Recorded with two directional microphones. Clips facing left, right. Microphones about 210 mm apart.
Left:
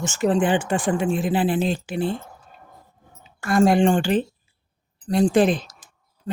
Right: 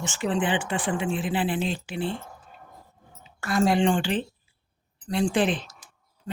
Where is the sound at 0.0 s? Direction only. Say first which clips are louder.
Left 6 dB; 45° left (ahead or behind).